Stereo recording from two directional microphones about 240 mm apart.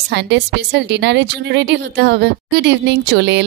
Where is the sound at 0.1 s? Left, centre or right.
Right.